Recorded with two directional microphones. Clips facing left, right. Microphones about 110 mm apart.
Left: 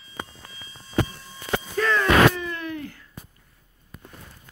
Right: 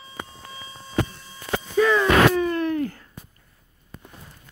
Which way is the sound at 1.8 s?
15° right (ahead or behind).